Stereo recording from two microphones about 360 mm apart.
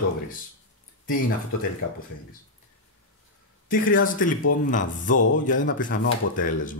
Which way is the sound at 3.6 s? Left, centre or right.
Left.